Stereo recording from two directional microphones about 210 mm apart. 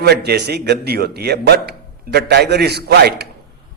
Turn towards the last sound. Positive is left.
turn(degrees=-50)  # may be behind; listen again after turning